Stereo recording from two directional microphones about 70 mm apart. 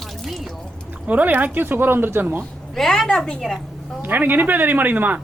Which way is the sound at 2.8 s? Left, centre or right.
Centre.